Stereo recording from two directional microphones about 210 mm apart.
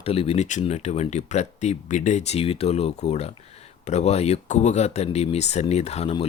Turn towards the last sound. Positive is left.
turn(degrees=30)  # may be behind; listen again after turning